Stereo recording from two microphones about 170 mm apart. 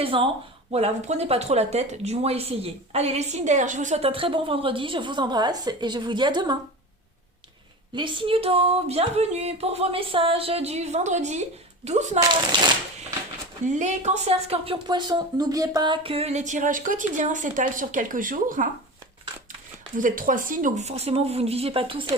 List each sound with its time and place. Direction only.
0.0 s a woman's voice: 30° right (ahead or behind)
7.9 s a woman's voice: 30° right (ahead or behind)
12.3 s speech: 25° right (ahead or behind)
13.7 s speech: 45° right (ahead or behind)
20.0 s a woman's voice: 50° right (ahead or behind); by 22.0 s 30° right (ahead or behind)